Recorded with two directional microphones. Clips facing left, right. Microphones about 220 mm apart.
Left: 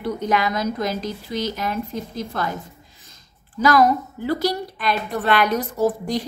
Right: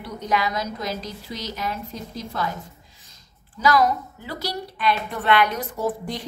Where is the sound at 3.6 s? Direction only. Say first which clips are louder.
Left 3 dB; 50° left (ahead or behind).